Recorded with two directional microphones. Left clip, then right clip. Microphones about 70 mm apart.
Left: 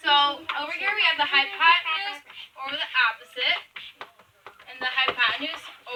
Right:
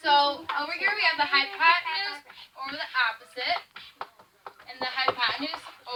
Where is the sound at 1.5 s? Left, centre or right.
Right.